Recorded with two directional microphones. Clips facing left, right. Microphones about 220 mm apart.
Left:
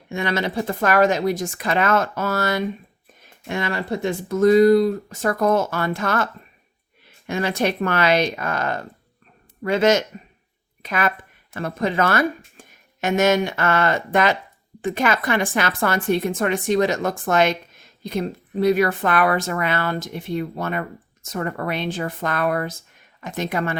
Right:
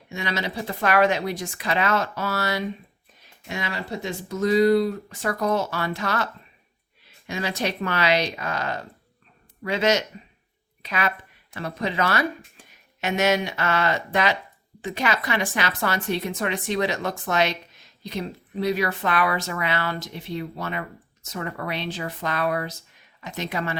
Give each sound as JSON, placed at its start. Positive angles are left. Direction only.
{"t": 0.1, "sound": "a woman's voice", "side_deg": 55}
{"t": 7.3, "sound": "a woman's voice", "side_deg": 55}